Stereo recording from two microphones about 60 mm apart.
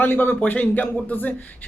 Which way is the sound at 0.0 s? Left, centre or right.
Left.